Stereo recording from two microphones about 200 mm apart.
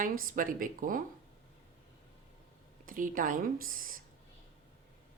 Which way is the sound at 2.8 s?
40° right (ahead or behind).